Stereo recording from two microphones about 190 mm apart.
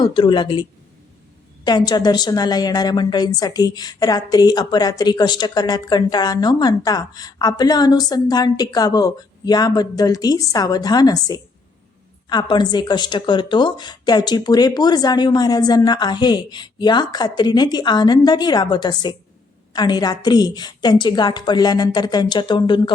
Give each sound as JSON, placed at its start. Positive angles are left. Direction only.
{"t": 0.0, "sound": "a woman's voice", "side_deg": 25}